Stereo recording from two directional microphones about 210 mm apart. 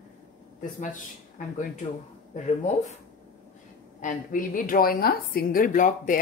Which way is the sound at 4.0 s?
40° left (ahead or behind).